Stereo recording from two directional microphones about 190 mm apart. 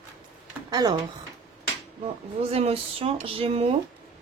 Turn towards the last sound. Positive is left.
turn(degrees=-30)  # may be behind; listen again after turning